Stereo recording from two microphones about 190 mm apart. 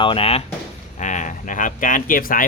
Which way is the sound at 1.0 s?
40° left (ahead or behind).